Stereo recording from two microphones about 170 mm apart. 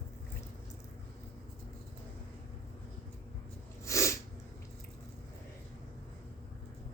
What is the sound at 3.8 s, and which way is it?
Sneeze, 20° left (ahead or behind).